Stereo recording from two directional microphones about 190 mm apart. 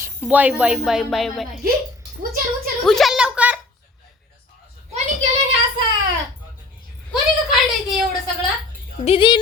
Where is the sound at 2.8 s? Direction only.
Centre (ahead or behind).